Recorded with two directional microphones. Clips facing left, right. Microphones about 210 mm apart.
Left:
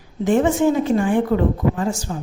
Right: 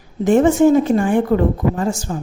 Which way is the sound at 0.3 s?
45° right (ahead or behind).